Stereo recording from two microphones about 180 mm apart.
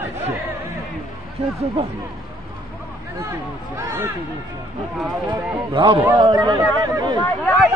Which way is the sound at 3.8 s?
15° right (ahead or behind).